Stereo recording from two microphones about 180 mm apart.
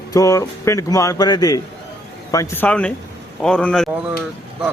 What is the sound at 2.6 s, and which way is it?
Speech, 5° left (ahead or behind).